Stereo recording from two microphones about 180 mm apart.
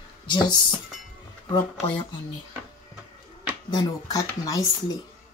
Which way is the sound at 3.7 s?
20° left (ahead or behind).